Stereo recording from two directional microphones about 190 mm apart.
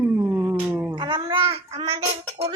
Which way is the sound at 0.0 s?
10° right (ahead or behind).